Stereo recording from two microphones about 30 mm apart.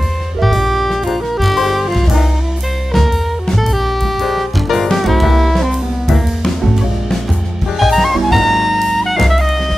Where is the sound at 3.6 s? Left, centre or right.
Centre.